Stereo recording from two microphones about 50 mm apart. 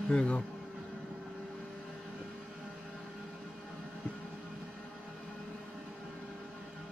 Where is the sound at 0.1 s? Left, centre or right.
Left.